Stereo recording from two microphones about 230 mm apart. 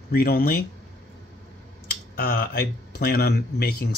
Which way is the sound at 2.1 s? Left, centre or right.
Left.